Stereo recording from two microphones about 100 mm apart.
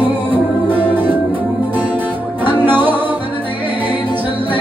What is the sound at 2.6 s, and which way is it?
Music, 20° right (ahead or behind).